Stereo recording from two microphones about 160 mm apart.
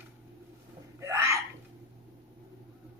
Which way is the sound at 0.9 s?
15° right (ahead or behind).